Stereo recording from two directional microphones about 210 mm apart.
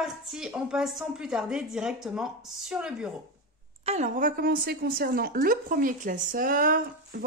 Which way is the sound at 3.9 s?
35° right (ahead or behind).